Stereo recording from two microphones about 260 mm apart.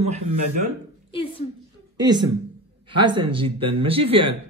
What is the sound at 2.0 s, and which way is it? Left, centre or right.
Speech, centre.